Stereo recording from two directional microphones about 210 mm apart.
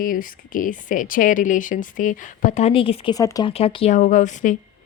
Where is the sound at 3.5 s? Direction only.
25° left (ahead or behind).